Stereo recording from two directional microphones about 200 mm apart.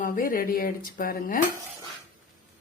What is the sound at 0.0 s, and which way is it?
Speech, 45° left (ahead or behind).